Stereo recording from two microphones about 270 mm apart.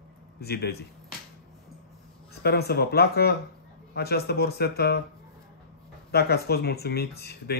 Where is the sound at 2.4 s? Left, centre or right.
Left.